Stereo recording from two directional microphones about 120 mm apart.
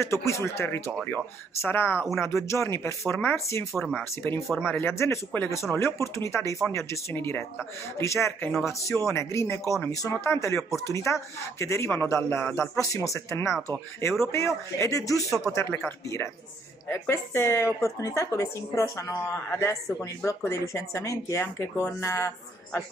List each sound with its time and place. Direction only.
0.0 s speech: 25° left (ahead or behind)
16.9 s speech: 20° left (ahead or behind)